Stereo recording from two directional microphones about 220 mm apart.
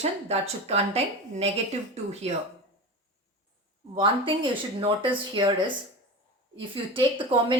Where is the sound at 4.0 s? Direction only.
25° right (ahead or behind).